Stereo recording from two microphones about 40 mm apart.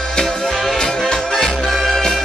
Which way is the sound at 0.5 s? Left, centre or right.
Centre.